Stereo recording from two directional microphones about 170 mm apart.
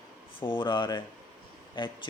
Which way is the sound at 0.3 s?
30° left (ahead or behind).